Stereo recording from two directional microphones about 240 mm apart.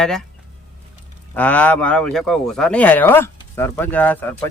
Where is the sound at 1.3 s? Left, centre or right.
Centre.